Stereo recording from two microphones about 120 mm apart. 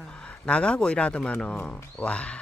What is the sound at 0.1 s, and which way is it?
Speech, 10° left (ahead or behind).